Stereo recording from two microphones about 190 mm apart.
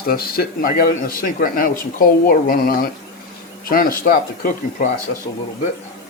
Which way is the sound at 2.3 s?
50° left (ahead or behind).